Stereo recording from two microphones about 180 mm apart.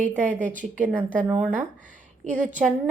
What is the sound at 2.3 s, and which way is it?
Speech, 45° right (ahead or behind).